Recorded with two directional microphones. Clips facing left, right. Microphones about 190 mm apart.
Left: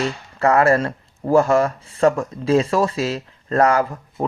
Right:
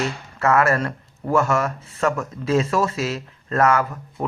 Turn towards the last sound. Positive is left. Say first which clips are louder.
# left 3 dB
turn(degrees=30)  # may be behind; listen again after turning